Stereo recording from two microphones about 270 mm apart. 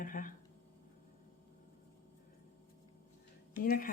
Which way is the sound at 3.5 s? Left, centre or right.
Left.